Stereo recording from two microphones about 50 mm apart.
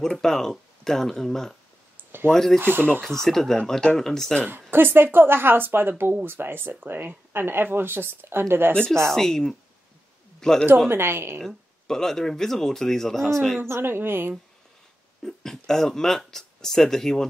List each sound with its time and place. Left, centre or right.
0.0 s speech: centre
2.0 s a sound: right
2.3 s speech: centre
2.6 s speech: right
3.0 s speech: centre
4.5 s speech: right
9.1 s speech: centre
10.9 s speech: right
11.4 s speech: centre
13.6 s speech: right
15.2 s speech: centre